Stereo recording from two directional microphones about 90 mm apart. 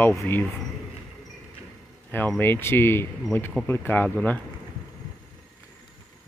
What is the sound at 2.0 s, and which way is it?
A man's voice, 15° left (ahead or behind).